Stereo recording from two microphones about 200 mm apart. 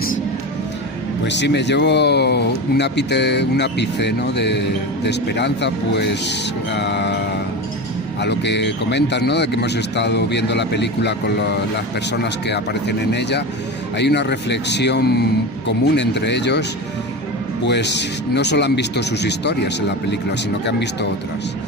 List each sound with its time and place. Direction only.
1.2 s speech: 60° left (ahead or behind)
8.2 s speech: 60° left (ahead or behind)
13.9 s speech: 60° left (ahead or behind)